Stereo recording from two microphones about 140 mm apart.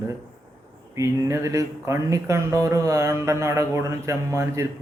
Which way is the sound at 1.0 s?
20° right (ahead or behind).